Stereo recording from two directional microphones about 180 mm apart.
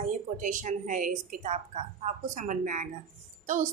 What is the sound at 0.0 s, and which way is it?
A woman's voice, 45° right (ahead or behind).